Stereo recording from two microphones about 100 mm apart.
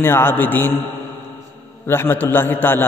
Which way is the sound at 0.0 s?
20° left (ahead or behind).